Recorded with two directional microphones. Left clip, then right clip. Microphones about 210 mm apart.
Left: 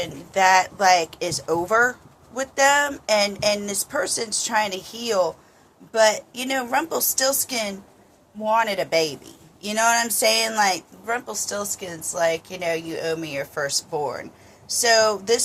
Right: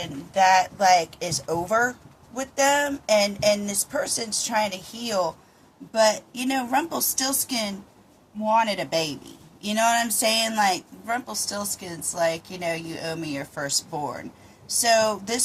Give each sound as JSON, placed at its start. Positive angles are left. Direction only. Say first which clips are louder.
{"t": 0.0, "sound": "speech", "louder": "left 1 dB", "side_deg": 20}